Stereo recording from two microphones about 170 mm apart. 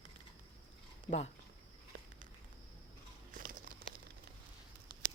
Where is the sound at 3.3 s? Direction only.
55° right (ahead or behind).